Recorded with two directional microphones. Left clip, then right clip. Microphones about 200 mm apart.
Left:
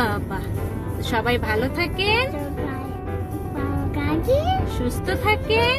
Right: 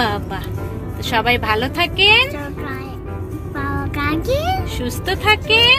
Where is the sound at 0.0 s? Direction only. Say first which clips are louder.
Right 4 dB; 20° right (ahead or behind).